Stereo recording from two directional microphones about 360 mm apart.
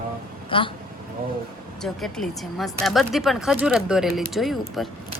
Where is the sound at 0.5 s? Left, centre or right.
Centre.